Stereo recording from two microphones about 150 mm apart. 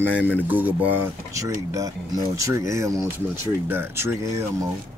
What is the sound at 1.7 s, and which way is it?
Speech, 25° right (ahead or behind).